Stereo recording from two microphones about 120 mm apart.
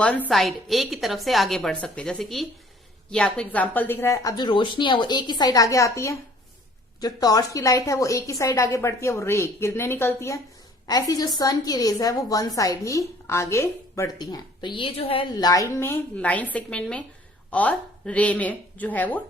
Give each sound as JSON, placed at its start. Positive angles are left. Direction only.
{"t": 0.3, "sound": "a woman's voice", "side_deg": 0}
{"t": 14.2, "sound": "a woman's voice", "side_deg": 35}
{"t": 15.3, "sound": "a woman's voice", "side_deg": 35}